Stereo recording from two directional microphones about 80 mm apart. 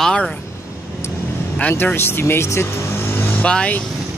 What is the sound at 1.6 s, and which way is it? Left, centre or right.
Speech, left.